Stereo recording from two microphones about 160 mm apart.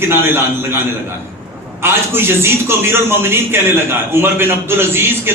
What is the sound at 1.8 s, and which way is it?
A man's voice, 15° right (ahead or behind).